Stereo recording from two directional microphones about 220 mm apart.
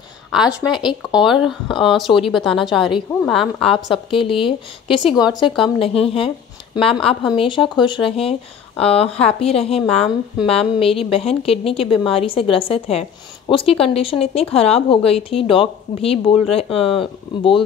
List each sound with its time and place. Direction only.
0.3 s a woman's voice: centre (ahead or behind)
4.1 s a woman's voice: 25° left (ahead or behind)
5.0 s speech: centre (ahead or behind)
5.6 s a woman's voice: 25° left (ahead or behind)